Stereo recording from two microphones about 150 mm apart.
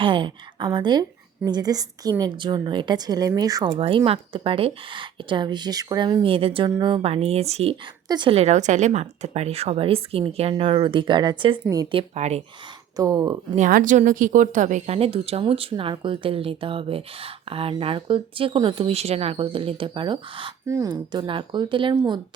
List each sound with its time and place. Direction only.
0.0 s a woman's voice: 35° right (ahead or behind)
3.8 s speech: 40° right (ahead or behind)
8.0 s a woman's voice: 30° right (ahead or behind)
11.9 s speech: 45° right (ahead or behind)
13.0 s a woman's voice: 25° right (ahead or behind)
13.6 s speech: 60° right (ahead or behind); by 20.5 s 35° right (ahead or behind)
20.7 s a woman's voice: 25° right (ahead or behind)